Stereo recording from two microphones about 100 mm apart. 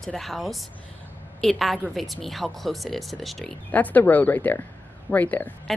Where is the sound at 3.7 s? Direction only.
15° left (ahead or behind).